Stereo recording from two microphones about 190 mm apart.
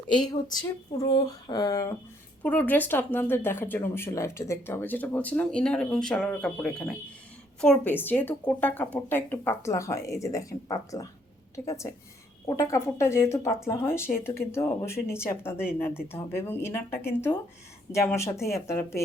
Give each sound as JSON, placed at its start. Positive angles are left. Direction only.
{"t": 0.3, "sound": "speech", "side_deg": 20}